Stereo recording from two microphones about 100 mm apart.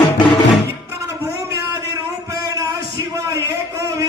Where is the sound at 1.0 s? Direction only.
25° right (ahead or behind).